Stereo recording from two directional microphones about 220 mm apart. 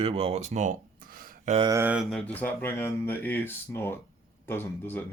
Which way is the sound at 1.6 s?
15° right (ahead or behind).